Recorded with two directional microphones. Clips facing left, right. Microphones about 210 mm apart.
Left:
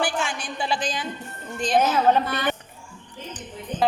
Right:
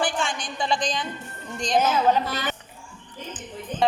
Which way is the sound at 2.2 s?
55° left (ahead or behind).